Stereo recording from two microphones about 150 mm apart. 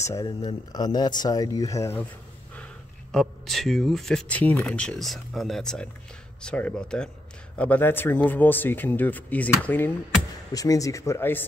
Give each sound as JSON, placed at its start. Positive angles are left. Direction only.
{"t": 0.0, "sound": "speech", "side_deg": 25}
{"t": 3.1, "sound": "speech", "side_deg": 5}
{"t": 10.5, "sound": "speech", "side_deg": 25}